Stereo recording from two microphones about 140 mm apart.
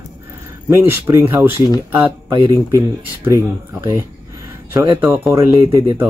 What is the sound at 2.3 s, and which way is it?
Speech, 35° right (ahead or behind).